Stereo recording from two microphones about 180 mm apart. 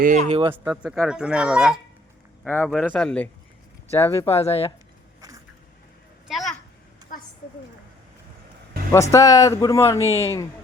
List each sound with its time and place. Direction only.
0.0 s speech: 45° right (ahead or behind)
0.5 s speech: 5° right (ahead or behind)
2.4 s speech: 10° left (ahead or behind)
2.6 s speech: 5° right (ahead or behind)
2.9 s speech: 5° left (ahead or behind)
4.3 s speech: 35° left (ahead or behind)
6.2 s a sound: centre (ahead or behind)
8.9 s speech: 15° left (ahead or behind)
10.1 s speech: 15° right (ahead or behind)